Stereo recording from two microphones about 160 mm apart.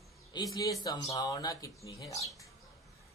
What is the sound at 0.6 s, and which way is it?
Speech, 20° left (ahead or behind).